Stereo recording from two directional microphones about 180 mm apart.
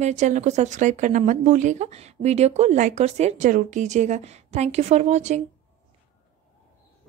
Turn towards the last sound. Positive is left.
turn(degrees=-40)  # may be behind; listen again after turning